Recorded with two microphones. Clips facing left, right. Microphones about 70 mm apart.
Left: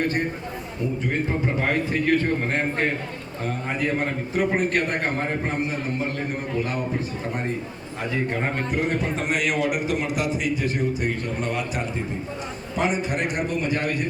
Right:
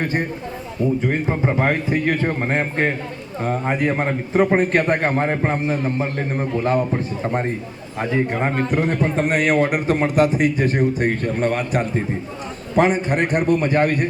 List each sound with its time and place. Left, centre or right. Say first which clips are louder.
1.3 s a man's voice: right 5 dB; right
8.7 s a man's voice: right 5 dB; right